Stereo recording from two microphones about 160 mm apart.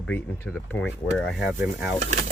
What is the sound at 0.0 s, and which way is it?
Speech, 15° left (ahead or behind).